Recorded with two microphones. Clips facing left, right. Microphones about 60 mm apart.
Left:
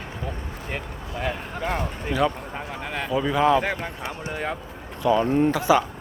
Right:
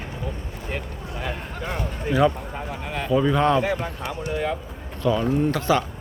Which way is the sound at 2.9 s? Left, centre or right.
Left.